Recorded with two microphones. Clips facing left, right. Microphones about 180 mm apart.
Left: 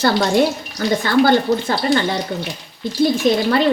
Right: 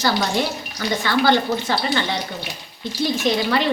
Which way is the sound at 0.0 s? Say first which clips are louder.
Left 6 dB; 50° left (ahead or behind).